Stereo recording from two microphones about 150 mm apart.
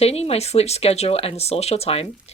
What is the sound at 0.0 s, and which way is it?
Speech, 45° left (ahead or behind).